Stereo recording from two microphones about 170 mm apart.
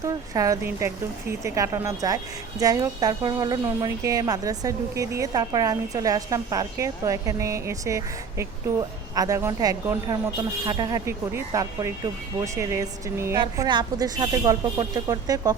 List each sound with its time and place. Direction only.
0.0 s speech: 20° right (ahead or behind)